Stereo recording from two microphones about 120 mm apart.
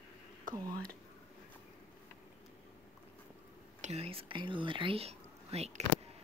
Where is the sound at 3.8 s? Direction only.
60° right (ahead or behind).